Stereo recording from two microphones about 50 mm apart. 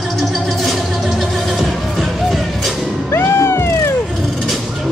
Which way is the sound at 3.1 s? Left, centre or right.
Left.